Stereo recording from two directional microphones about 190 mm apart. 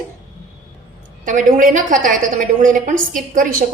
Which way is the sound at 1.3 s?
45° right (ahead or behind).